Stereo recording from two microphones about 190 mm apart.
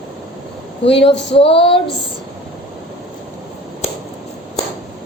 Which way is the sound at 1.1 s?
65° left (ahead or behind).